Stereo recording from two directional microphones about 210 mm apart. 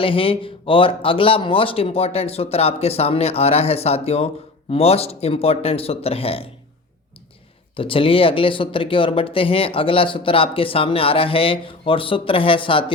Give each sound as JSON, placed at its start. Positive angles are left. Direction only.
{"t": 0.0, "sound": "speech", "side_deg": 25}
{"t": 7.8, "sound": "speech", "side_deg": 25}